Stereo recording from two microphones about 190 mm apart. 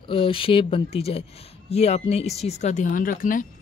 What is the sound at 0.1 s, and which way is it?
Speech, 30° left (ahead or behind).